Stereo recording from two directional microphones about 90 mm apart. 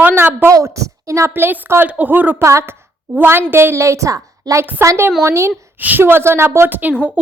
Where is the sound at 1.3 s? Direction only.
20° right (ahead or behind).